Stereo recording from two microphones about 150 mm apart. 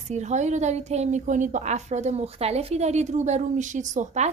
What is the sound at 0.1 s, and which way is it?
A woman's voice, 50° right (ahead or behind).